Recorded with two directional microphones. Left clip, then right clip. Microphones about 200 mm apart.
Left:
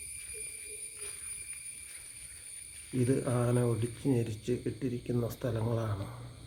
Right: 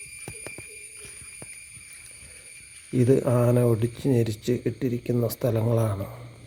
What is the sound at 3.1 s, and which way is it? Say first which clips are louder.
Speech: right 10 dB; 35° right (ahead or behind).